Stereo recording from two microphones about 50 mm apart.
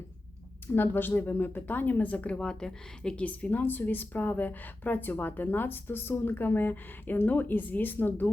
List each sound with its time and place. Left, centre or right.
0.7 s a woman's voice: left; by 3.2 s centre
3.2 s a woman's voice: left